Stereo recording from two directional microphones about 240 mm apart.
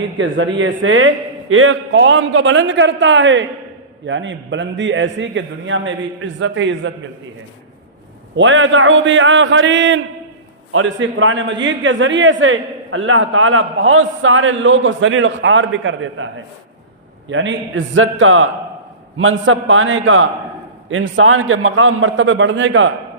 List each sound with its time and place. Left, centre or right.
0.2 s a man's voice: right
8.4 s a man's voice: right
17.3 s a man's voice: right